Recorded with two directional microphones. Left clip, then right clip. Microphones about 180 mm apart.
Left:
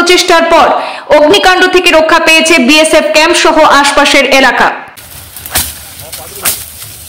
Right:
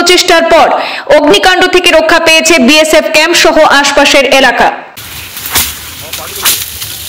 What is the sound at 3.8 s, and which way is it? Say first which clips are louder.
Speech: even; centre (ahead or behind).